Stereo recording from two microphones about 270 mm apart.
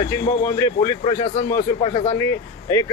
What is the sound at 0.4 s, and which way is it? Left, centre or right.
Speech, centre.